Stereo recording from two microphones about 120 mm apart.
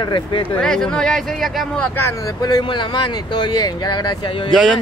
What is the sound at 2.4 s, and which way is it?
Speech, 35° left (ahead or behind).